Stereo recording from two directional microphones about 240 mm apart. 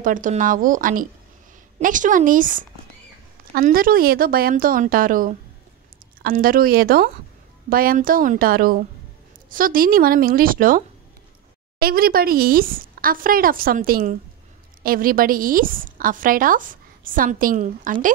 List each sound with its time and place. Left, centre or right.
0.0 s a woman's voice: right
11.8 s a woman's voice: right